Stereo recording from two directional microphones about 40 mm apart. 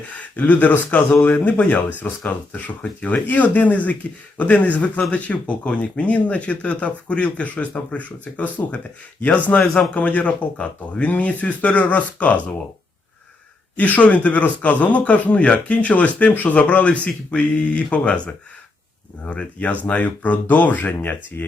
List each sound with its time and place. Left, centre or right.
0.1 s speech: left
9.6 s a man's voice: centre
9.9 s speech: left
13.7 s speech: left
19.3 s speech: left
20.0 s speech: left